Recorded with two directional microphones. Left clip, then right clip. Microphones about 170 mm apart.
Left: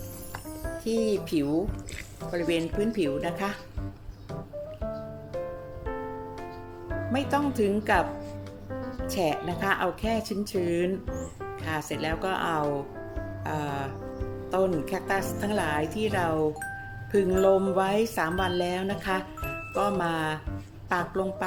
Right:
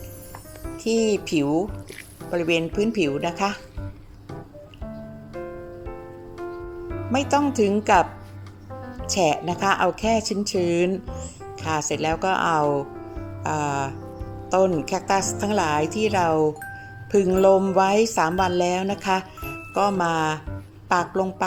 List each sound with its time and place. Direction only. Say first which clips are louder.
0.7 s a woman's voice: right 5 dB; 20° right (ahead or behind)
7.1 s a woman's voice: right 6 dB; 15° right (ahead or behind)
9.0 s a woman's voice: right 7 dB; 15° right (ahead or behind)